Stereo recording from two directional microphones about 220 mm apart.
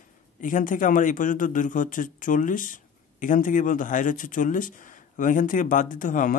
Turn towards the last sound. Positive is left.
turn(degrees=35)  # may be behind; listen again after turning